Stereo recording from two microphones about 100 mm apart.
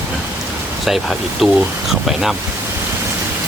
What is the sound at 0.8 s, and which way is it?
Speech, centre (ahead or behind).